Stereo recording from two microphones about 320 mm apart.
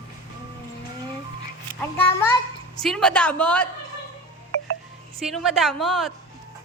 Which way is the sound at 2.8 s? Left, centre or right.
Centre.